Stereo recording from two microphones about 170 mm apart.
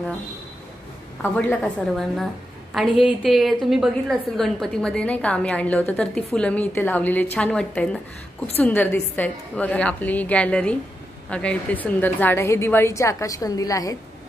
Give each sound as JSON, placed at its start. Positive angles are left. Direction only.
{"t": 1.6, "sound": "a woman's voice", "side_deg": 0}